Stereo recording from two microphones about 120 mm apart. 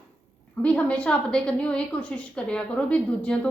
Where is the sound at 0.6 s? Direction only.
10° left (ahead or behind).